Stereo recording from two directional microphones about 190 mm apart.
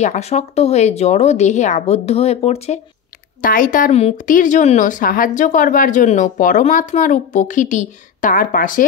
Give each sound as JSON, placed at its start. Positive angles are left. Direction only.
{"t": 0.0, "sound": "speech", "side_deg": 35}
{"t": 3.3, "sound": "speech", "side_deg": 45}